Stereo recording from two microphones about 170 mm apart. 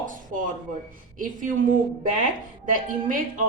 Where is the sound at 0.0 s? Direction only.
50° right (ahead or behind).